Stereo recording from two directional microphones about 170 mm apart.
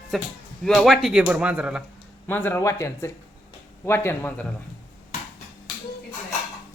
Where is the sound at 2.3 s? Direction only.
10° left (ahead or behind).